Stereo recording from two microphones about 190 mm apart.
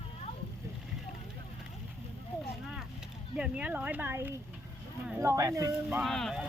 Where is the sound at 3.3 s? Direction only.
5° right (ahead or behind).